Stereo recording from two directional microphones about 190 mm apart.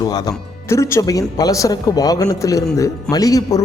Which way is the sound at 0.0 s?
20° left (ahead or behind).